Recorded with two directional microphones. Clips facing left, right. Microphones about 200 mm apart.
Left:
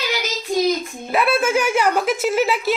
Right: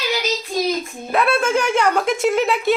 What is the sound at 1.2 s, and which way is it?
A woman's voice, 5° left (ahead or behind).